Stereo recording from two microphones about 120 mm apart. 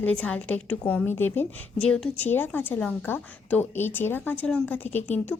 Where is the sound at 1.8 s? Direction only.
5° left (ahead or behind).